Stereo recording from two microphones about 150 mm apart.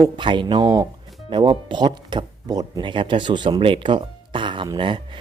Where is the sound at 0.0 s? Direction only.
30° right (ahead or behind).